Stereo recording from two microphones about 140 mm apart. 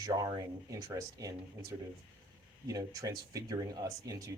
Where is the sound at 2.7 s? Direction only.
25° right (ahead or behind).